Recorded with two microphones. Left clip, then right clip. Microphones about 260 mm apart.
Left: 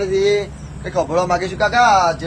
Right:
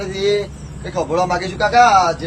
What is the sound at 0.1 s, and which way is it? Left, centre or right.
A man's voice, centre.